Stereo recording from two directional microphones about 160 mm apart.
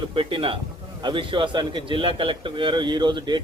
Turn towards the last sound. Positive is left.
turn(degrees=-30)  # may be behind; listen again after turning